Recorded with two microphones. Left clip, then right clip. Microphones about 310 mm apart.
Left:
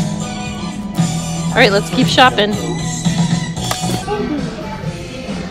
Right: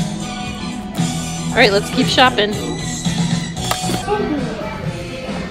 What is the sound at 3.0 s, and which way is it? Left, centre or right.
Music, centre.